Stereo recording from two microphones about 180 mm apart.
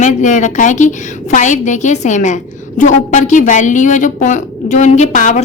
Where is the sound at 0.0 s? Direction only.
45° left (ahead or behind).